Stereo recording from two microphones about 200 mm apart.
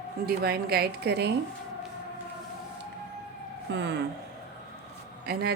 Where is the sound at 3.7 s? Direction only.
60° right (ahead or behind).